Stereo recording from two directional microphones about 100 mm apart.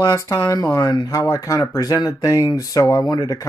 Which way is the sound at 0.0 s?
30° left (ahead or behind).